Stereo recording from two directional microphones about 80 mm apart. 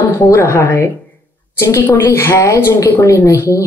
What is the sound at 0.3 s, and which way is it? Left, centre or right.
A woman's voice, left.